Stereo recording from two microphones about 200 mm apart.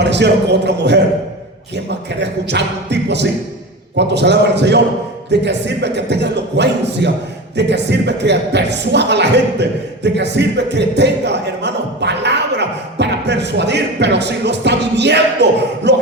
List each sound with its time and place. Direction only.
0.0 s speech: 60° right (ahead or behind)